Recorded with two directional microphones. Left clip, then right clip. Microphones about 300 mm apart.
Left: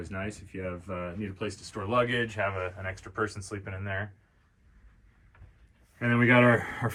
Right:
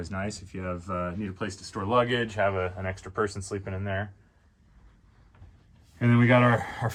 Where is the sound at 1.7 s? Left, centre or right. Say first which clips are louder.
Right 3 dB; right.